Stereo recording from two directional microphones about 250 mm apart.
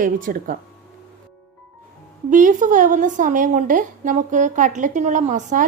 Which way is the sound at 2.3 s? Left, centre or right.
Right.